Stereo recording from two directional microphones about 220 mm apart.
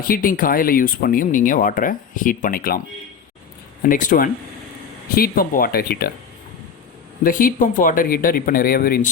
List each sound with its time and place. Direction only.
0.0 s speech: 40° left (ahead or behind)
3.8 s speech: 35° left (ahead or behind)
7.3 s speech: 40° left (ahead or behind)